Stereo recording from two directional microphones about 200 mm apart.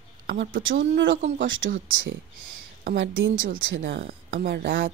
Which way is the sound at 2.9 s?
65° right (ahead or behind).